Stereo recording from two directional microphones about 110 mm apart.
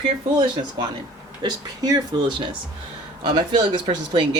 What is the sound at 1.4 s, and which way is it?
Speech, 40° right (ahead or behind).